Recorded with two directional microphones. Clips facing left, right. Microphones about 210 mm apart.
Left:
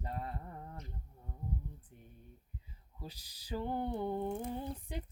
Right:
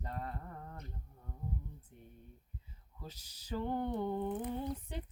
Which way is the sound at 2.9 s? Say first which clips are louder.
Left 1 dB; 10° left (ahead or behind).